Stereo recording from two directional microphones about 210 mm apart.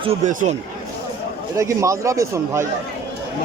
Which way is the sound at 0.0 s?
30° right (ahead or behind).